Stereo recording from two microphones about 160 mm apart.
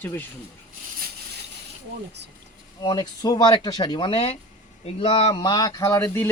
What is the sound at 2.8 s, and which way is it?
Speech, 25° left (ahead or behind).